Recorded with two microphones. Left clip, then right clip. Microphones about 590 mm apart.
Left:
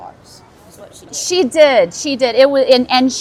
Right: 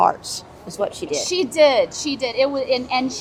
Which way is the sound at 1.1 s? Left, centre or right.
Left.